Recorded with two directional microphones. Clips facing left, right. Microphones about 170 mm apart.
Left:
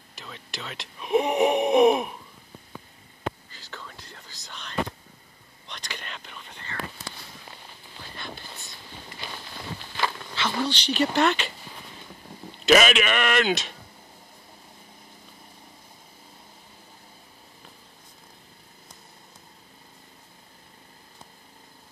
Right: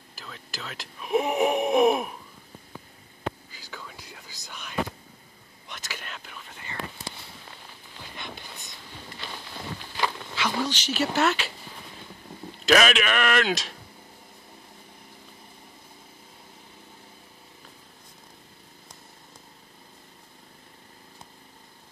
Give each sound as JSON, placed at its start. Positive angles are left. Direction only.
{"t": 0.1, "sound": "speech", "side_deg": 0}
{"t": 3.4, "sound": "whispering", "side_deg": -5}
{"t": 5.7, "sound": "speech", "side_deg": -5}
{"t": 8.0, "sound": "a sound", "side_deg": -15}
{"t": 8.4, "sound": "vehicle", "side_deg": -20}
{"t": 10.0, "sound": "speech", "side_deg": -10}
{"t": 12.6, "sound": "speech", "side_deg": 0}